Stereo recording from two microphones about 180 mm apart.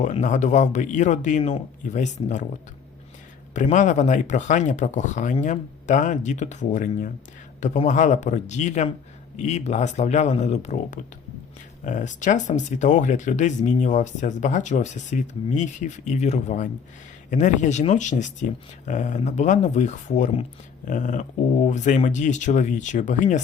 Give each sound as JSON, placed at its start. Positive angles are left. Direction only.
{"t": 0.0, "sound": "speech", "side_deg": 45}
{"t": 3.5, "sound": "speech", "side_deg": 45}